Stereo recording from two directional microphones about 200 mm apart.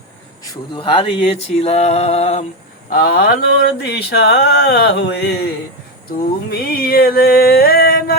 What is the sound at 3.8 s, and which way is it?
Speech, 55° left (ahead or behind).